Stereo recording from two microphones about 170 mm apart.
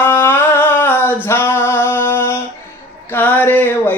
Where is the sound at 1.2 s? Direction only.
15° left (ahead or behind).